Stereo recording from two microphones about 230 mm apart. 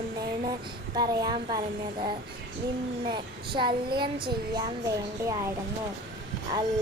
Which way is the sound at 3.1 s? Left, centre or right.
Right.